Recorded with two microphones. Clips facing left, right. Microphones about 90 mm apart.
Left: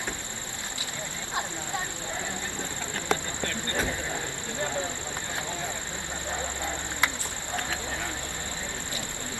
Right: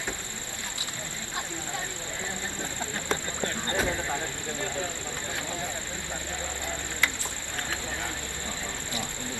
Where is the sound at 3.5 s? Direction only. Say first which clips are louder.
Right 1 dB; 20° right (ahead or behind).